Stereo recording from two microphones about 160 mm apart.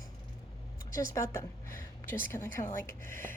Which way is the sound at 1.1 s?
15° left (ahead or behind).